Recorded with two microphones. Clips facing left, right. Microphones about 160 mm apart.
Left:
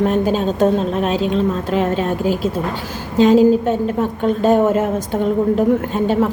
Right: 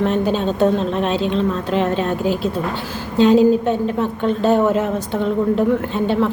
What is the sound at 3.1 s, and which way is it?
A woman's voice, 40° left (ahead or behind).